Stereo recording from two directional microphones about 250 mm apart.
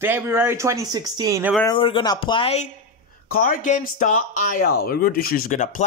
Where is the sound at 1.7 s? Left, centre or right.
Centre.